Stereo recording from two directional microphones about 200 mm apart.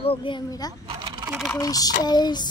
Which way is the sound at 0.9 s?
20° right (ahead or behind).